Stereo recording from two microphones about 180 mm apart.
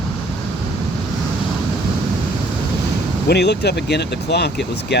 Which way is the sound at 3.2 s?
70° left (ahead or behind).